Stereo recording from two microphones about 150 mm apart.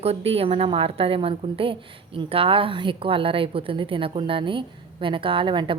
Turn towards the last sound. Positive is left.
turn(degrees=-35)  # may be behind; listen again after turning